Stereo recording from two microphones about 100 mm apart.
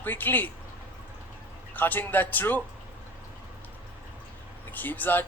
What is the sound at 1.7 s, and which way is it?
Speech, 20° left (ahead or behind).